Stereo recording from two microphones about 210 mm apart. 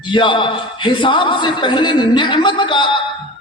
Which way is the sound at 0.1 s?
20° left (ahead or behind).